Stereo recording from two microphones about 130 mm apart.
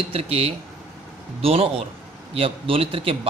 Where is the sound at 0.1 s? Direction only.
50° right (ahead or behind).